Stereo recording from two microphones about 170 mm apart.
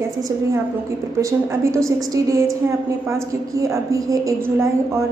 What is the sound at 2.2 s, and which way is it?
A woman's voice, 20° right (ahead or behind).